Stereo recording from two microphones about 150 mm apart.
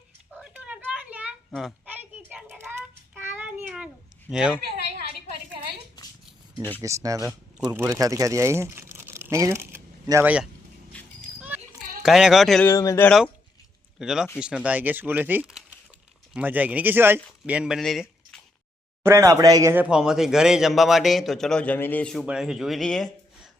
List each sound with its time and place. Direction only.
0.3 s a sound: centre (ahead or behind)
3.2 s child singing: 10° right (ahead or behind)
4.3 s speech: 5° right (ahead or behind)
6.6 s speech: 10° left (ahead or behind)
6.8 s speech: 20° right (ahead or behind)
7.3 s speech: 10° right (ahead or behind)
11.3 s a sound: 10° right (ahead or behind)
12.0 s speech: centre (ahead or behind)
12.6 s speech: 20° left (ahead or behind)
13.1 s speech: 5° left (ahead or behind)
19.0 s speech: 20° right (ahead or behind); by 23.5 s 5° left (ahead or behind)